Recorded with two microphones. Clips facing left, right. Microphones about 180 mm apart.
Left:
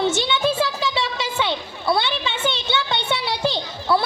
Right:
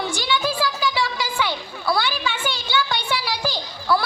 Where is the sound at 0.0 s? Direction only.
25° left (ahead or behind).